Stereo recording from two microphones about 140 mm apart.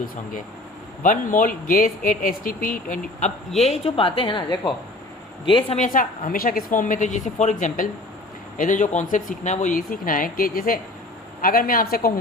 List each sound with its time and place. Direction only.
1.0 s speech: 70° left (ahead or behind)
3.6 s a woman's voice: 45° left (ahead or behind)
5.7 s a woman's voice: 65° left (ahead or behind); by 12.1 s 90° left